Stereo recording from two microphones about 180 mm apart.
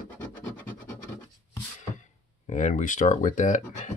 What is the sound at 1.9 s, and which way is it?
Speech, 40° left (ahead or behind).